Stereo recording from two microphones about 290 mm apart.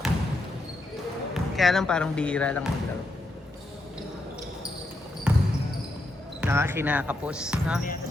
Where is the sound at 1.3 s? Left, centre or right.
Centre.